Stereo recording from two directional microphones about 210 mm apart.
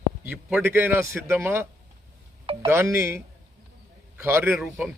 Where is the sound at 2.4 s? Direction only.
25° right (ahead or behind).